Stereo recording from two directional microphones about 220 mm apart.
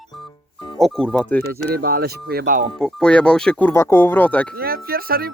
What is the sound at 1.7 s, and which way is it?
Speech, 40° right (ahead or behind).